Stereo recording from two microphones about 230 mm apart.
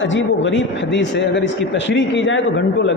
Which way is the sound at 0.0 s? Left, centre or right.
Left.